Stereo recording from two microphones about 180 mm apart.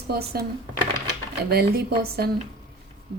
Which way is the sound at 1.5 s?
60° right (ahead or behind).